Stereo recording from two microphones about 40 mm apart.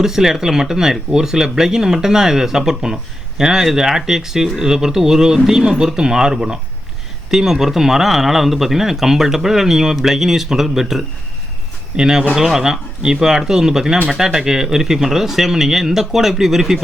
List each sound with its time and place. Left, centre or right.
0.0 s speech: centre